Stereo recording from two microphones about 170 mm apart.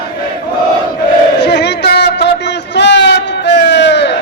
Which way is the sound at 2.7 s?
90° left.